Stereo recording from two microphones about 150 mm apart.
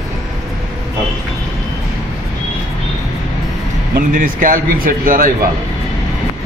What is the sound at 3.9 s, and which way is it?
Speech, 65° right (ahead or behind).